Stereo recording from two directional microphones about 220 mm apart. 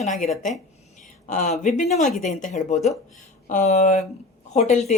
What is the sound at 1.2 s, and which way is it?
A woman's voice, 35° left (ahead or behind).